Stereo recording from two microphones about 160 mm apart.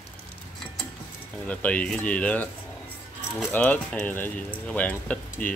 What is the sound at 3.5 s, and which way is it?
Speech, 10° left (ahead or behind).